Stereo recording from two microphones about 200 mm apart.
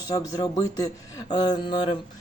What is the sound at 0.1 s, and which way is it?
Speech, 20° left (ahead or behind).